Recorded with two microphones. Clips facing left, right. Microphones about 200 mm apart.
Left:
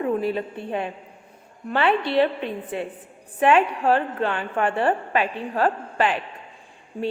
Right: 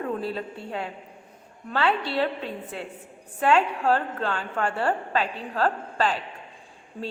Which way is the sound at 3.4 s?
15° left (ahead or behind).